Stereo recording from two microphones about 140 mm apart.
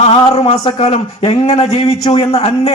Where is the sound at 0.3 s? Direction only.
50° left (ahead or behind).